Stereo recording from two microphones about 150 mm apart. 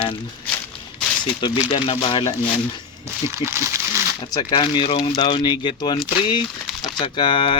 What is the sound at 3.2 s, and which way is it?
Speech, 20° right (ahead or behind).